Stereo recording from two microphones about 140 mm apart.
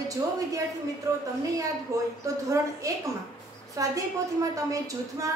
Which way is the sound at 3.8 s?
25° right (ahead or behind).